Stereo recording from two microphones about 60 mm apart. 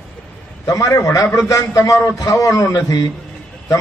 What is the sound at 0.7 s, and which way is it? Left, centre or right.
Speech, left.